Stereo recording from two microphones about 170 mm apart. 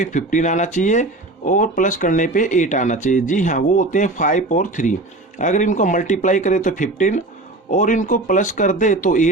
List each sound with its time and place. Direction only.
0.0 s speech: 45° left (ahead or behind)